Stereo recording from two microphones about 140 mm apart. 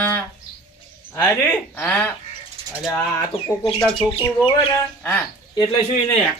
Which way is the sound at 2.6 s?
40° right (ahead or behind).